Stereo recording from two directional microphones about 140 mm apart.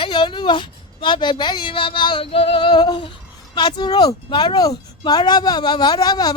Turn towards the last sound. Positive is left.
turn(degrees=30)  # may be behind; listen again after turning